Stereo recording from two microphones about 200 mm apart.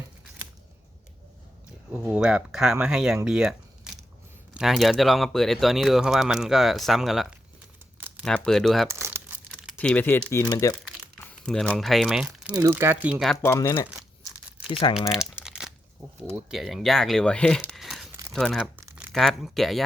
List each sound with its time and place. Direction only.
1.9 s speech: 5° right (ahead or behind)
3.9 s a sound: 5° right (ahead or behind)
4.5 s speech: centre (ahead or behind)
8.9 s crumpling: 10° right (ahead or behind)
9.7 s speech: 5° left (ahead or behind)
12.5 s speech: 15° right (ahead or behind)
13.4 s speech: 15° left (ahead or behind)
14.7 s speech: 25° left (ahead or behind)
15.1 s crumpling: 5° right (ahead or behind)
16.3 s speech: centre (ahead or behind)